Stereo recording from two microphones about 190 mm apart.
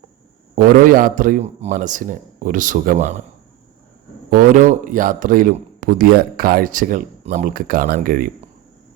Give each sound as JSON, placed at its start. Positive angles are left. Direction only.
{"t": 0.5, "sound": "speech", "side_deg": -45}
{"t": 4.3, "sound": "speech", "side_deg": -45}